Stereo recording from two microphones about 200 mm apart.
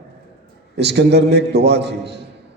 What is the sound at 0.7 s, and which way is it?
A man's voice, 55° right (ahead or behind).